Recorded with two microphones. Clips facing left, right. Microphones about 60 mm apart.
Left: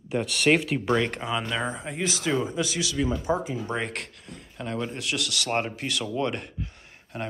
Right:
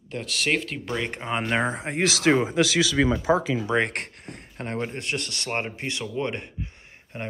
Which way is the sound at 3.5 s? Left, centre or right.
Right.